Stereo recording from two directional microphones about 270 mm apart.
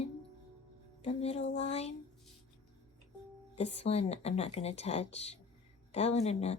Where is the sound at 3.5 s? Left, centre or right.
Left.